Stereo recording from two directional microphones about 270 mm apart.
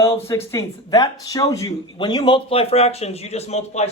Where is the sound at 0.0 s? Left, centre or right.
Centre.